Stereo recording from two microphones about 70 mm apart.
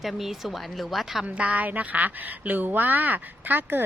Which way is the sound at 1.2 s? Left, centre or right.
Centre.